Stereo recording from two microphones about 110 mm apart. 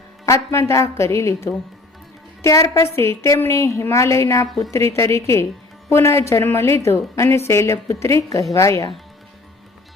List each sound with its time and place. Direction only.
0.3 s a woman's voice: 25° left (ahead or behind)
4.4 s a woman's voice: centre (ahead or behind)
4.7 s a woman's voice: 25° left (ahead or behind)